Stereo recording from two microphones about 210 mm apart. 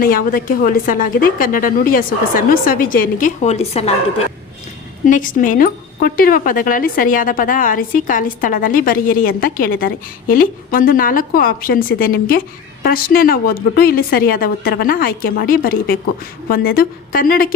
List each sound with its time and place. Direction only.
0.0 s speech: 40° left (ahead or behind)
5.0 s a woman's voice: 40° left (ahead or behind)